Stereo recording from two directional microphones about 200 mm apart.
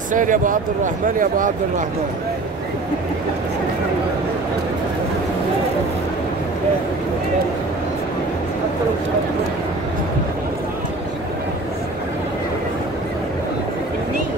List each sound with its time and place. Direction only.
0.1 s speech: 40° right (ahead or behind)